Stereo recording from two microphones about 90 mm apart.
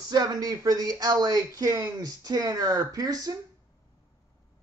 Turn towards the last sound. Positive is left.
turn(degrees=-45)  # may be behind; listen again after turning